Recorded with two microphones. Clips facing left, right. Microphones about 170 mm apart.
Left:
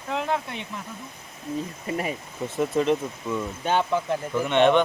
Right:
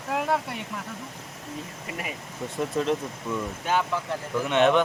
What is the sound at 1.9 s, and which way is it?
Speech, 35° left (ahead or behind).